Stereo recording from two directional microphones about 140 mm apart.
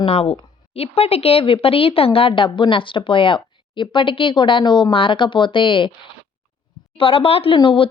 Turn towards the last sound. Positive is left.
turn(degrees=40)  # may be behind; listen again after turning